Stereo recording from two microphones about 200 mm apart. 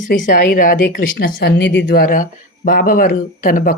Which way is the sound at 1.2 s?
55° left (ahead or behind).